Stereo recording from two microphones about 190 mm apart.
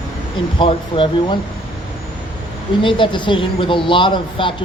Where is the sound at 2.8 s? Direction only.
25° left (ahead or behind).